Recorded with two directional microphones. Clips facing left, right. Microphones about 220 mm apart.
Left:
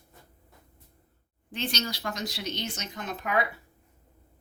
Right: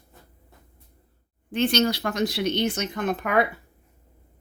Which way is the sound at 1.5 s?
55° right (ahead or behind).